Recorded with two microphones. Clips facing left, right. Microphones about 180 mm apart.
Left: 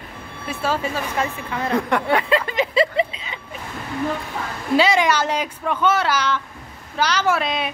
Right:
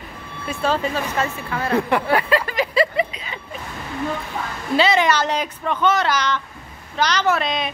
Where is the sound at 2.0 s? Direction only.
25° left (ahead or behind).